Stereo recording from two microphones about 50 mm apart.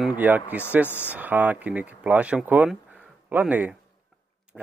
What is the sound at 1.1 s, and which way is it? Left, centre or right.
Speech, right.